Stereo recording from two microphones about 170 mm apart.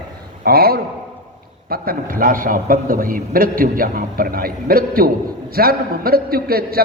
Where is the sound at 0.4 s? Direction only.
65° right (ahead or behind).